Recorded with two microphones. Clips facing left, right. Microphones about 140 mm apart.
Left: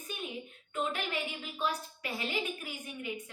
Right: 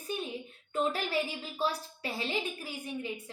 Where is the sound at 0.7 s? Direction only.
35° right (ahead or behind).